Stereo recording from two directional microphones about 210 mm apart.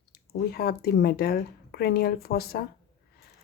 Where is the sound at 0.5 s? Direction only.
45° left (ahead or behind).